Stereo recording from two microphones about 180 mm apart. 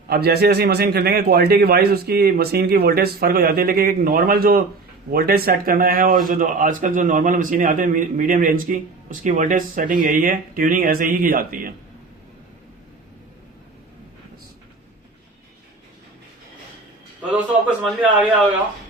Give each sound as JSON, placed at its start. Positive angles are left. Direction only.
{"t": 0.1, "sound": "a man's voice", "side_deg": -60}
{"t": 17.8, "sound": "a man's voice", "side_deg": -5}